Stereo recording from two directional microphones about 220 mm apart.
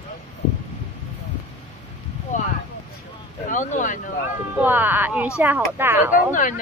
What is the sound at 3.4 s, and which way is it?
Speech, 35° left (ahead or behind).